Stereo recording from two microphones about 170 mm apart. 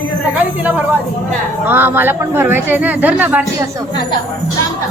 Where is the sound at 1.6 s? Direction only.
10° right (ahead or behind).